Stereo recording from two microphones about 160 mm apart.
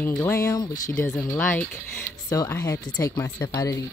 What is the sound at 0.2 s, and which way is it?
Speech, 15° left (ahead or behind).